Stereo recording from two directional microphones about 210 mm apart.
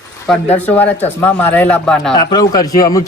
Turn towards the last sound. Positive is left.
turn(degrees=15)  # may be behind; listen again after turning